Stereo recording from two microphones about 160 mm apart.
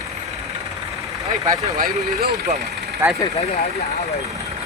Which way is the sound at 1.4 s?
20° right (ahead or behind).